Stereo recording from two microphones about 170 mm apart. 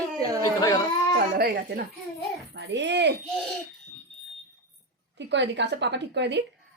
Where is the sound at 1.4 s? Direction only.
65° right (ahead or behind).